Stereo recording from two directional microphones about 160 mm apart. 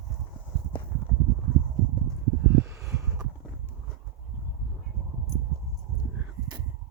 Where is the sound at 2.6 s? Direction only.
20° right (ahead or behind).